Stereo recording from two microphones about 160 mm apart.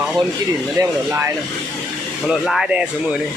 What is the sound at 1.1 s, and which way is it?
Speech, 15° right (ahead or behind).